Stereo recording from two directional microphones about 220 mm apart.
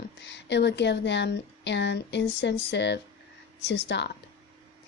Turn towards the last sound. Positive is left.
turn(degrees=50)  # may be behind; listen again after turning